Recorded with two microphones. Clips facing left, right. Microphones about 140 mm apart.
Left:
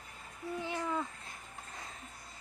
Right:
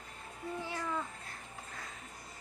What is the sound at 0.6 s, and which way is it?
Speech, 20° left (ahead or behind).